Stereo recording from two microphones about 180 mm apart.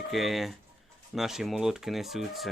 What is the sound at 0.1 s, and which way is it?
Speech, centre (ahead or behind).